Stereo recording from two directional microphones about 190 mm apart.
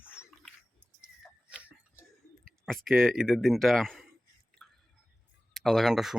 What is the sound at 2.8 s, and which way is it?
Speech, centre (ahead or behind).